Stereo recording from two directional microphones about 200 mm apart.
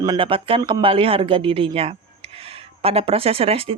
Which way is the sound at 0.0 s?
20° right (ahead or behind).